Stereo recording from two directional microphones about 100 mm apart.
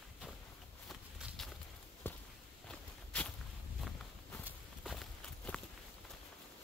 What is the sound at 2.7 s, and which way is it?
Walk, 10° left (ahead or behind).